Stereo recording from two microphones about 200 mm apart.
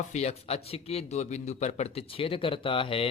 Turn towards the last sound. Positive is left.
turn(degrees=25)  # may be behind; listen again after turning